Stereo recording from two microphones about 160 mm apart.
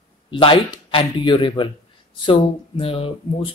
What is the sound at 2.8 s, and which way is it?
Speech, 35° left (ahead or behind).